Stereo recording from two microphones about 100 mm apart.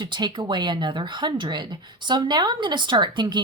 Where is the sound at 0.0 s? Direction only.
45° right (ahead or behind).